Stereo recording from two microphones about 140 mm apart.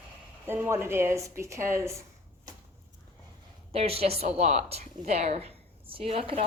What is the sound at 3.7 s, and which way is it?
A woman's voice, 45° right (ahead or behind).